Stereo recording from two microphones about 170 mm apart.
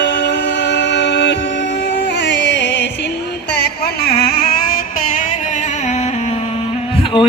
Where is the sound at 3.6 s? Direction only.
70° left (ahead or behind).